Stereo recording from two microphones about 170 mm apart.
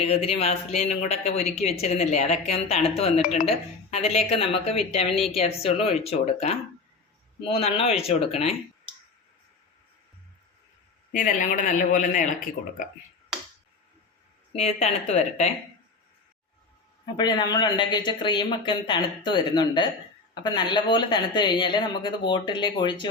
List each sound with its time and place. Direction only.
0.0 s speech: 35° left (ahead or behind)
11.1 s a man's voice: 50° left (ahead or behind)
14.5 s speech: 40° left (ahead or behind)
17.2 s speech: 25° left (ahead or behind)